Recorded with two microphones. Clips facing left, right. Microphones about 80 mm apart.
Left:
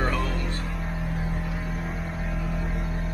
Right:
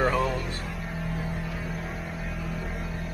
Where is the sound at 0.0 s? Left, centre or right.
Centre.